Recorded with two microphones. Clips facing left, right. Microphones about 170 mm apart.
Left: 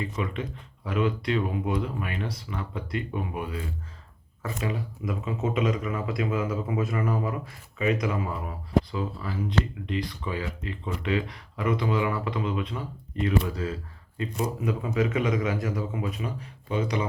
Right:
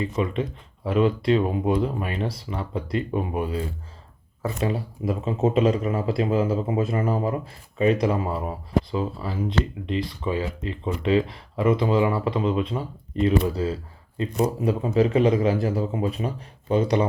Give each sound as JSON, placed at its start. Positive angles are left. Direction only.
{"t": 0.0, "sound": "a man's voice", "side_deg": -25}